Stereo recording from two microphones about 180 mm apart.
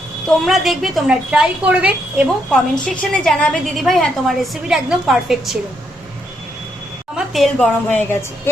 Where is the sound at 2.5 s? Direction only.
5° left (ahead or behind).